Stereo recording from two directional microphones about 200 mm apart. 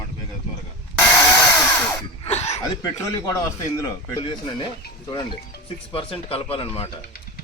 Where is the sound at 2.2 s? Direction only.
30° left (ahead or behind).